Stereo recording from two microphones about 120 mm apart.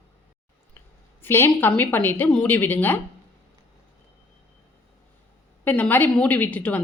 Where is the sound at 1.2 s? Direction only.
20° left (ahead or behind).